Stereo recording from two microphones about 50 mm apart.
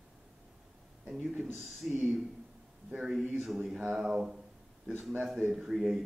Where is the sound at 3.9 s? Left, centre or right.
Centre.